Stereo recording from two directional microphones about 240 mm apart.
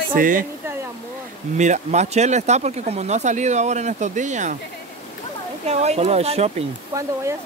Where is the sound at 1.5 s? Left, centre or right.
Right.